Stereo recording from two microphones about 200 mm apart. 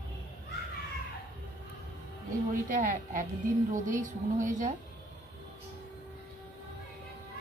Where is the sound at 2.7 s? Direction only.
40° right (ahead or behind).